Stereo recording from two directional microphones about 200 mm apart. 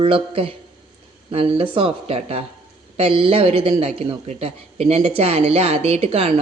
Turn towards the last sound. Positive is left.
turn(degrees=-30)  # may be behind; listen again after turning